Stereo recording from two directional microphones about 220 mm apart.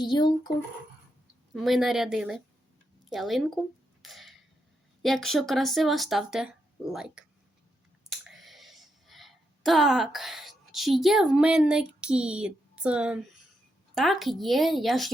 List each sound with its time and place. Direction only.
0.0 s speech: 20° left (ahead or behind)
1.5 s speech: centre (ahead or behind)
4.0 s a sound: centre (ahead or behind)
5.0 s speech: centre (ahead or behind)
8.3 s a sound: centre (ahead or behind)
13.9 s speech: centre (ahead or behind)